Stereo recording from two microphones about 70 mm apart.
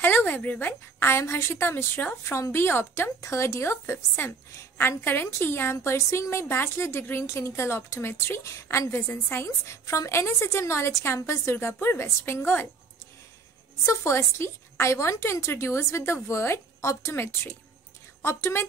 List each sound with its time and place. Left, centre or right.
0.0 s a woman's voice: left
13.8 s a woman's voice: left
17.1 s a woman's voice: left